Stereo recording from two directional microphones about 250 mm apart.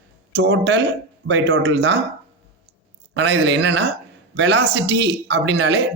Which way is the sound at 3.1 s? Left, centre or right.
Right.